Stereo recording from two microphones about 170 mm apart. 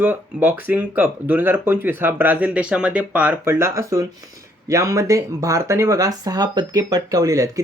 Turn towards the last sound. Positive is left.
turn(degrees=-20)  # may be behind; listen again after turning